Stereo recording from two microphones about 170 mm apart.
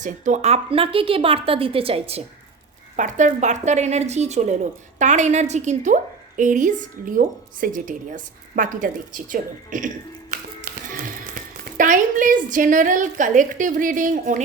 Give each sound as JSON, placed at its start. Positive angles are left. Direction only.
{"t": 0.0, "sound": "a woman's voice", "side_deg": -45}
{"t": 2.9, "sound": "a woman's voice", "side_deg": -50}
{"t": 10.3, "sound": "music", "side_deg": -55}
{"t": 11.8, "sound": "a woman's voice", "side_deg": -50}